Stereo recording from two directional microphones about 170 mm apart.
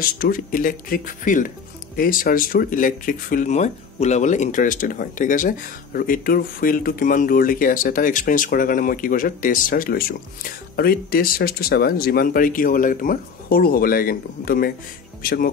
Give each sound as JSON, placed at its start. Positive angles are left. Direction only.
{"t": 0.2, "sound": "speech", "side_deg": 55}